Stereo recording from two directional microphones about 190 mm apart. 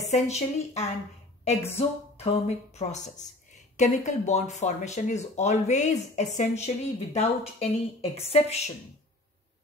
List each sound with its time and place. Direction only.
0.1 s speech: 35° left (ahead or behind)